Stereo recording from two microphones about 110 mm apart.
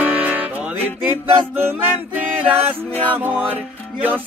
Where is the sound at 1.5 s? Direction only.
20° right (ahead or behind).